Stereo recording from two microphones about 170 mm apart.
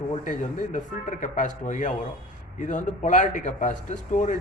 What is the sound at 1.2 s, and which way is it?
A man's voice, 50° left (ahead or behind).